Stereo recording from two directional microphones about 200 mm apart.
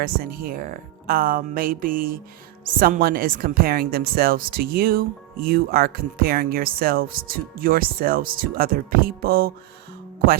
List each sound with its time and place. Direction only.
0.0 s speech: 50° right (ahead or behind)